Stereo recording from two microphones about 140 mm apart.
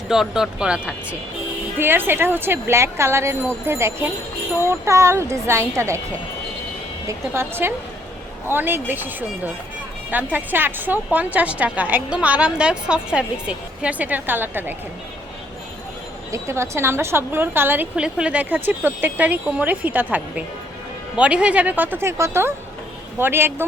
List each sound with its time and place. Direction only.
0.1 s a woman's voice: 5° right (ahead or behind); by 6.0 s 20° right (ahead or behind)
7.1 s a woman's voice: 15° right (ahead or behind)
16.3 s a woman's voice: 20° right (ahead or behind)